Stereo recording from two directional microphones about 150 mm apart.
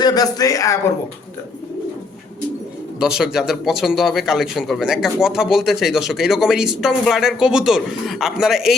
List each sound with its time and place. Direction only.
0.0 s speech: 25° left (ahead or behind)
3.0 s a man's voice: 5° right (ahead or behind)